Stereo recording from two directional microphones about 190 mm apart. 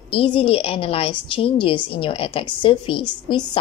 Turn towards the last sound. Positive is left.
turn(degrees=25)  # may be behind; listen again after turning